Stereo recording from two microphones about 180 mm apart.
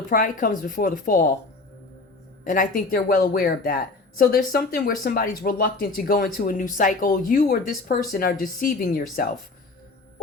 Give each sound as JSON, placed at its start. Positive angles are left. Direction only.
{"t": 0.1, "sound": "speech", "side_deg": 50}
{"t": 2.4, "sound": "speech", "side_deg": 50}